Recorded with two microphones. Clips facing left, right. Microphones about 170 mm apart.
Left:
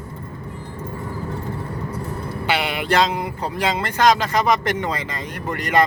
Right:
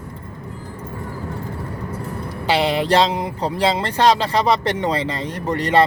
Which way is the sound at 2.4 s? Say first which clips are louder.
Right 5 dB; 35° right (ahead or behind).